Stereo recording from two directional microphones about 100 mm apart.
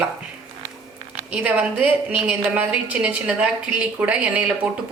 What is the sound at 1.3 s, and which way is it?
A woman's voice, 15° right (ahead or behind).